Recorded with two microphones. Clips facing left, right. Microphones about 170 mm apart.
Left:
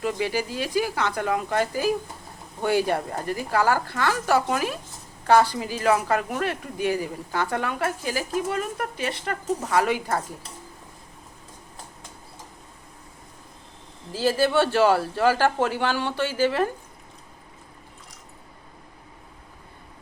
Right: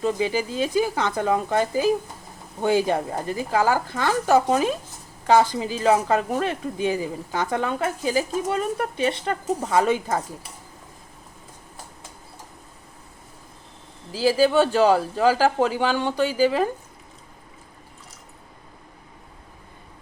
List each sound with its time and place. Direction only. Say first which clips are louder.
0.0 s speech: right 3 dB; 25° right (ahead or behind)
14.5 s speech: right 2 dB; 15° right (ahead or behind)